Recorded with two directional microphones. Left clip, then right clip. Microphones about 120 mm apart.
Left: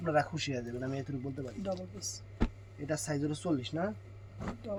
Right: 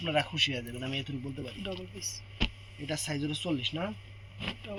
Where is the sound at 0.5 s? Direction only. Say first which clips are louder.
Right 2 dB; 10° left (ahead or behind).